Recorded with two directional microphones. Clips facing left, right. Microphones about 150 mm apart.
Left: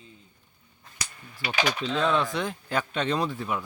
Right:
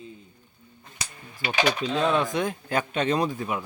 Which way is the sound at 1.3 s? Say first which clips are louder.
Right 3 dB; 15° right (ahead or behind).